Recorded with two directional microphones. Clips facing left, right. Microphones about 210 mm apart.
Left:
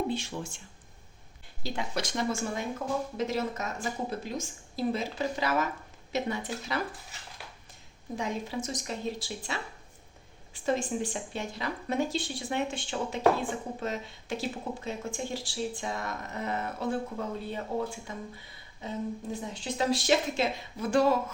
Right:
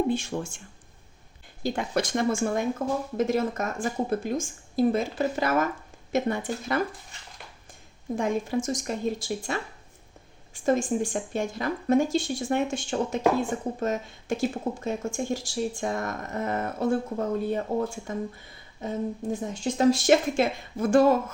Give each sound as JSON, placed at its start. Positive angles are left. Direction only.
{"t": 0.1, "sound": "speech", "side_deg": -50}
{"t": 1.6, "sound": "speech", "side_deg": -50}
{"t": 8.1, "sound": "speech", "side_deg": -50}